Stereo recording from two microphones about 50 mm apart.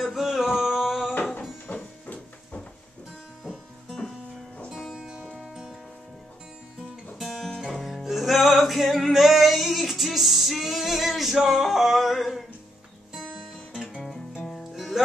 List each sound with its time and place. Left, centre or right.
0.1 s a sound: centre
1.7 s printer: left
4.9 s music: centre
7.2 s guitar: centre
7.5 s music: centre
13.8 s music: centre